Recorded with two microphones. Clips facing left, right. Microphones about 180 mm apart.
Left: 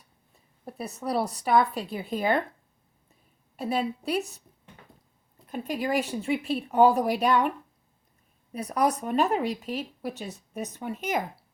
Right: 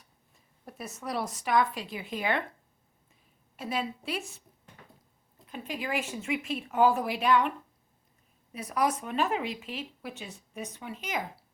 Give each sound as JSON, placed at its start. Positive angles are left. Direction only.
{"t": 0.6, "sound": "speech", "side_deg": 35}
{"t": 3.6, "sound": "speech", "side_deg": 40}
{"t": 5.5, "sound": "speech", "side_deg": 45}
{"t": 8.5, "sound": "speech", "side_deg": 35}